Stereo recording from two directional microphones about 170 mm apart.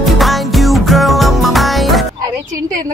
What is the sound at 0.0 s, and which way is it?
Music, centre (ahead or behind).